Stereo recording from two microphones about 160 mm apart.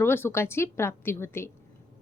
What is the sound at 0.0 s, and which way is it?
Speech, 15° left (ahead or behind).